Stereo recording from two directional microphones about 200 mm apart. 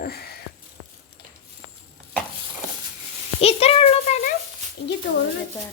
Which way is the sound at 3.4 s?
30° left (ahead or behind).